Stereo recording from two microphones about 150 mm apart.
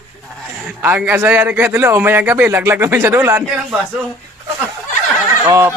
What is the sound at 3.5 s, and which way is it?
Speech, 5° right (ahead or behind).